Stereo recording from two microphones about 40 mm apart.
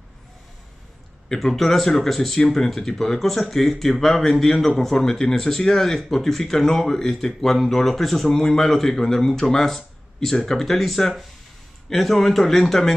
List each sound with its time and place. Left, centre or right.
1.5 s a man's voice: centre